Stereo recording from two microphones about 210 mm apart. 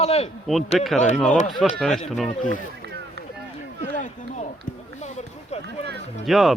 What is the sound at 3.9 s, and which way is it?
Speech, 35° left (ahead or behind).